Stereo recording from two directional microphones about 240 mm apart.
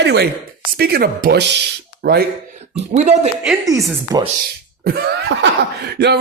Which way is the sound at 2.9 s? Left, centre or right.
Right.